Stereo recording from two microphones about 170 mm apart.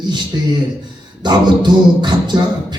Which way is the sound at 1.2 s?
25° right (ahead or behind).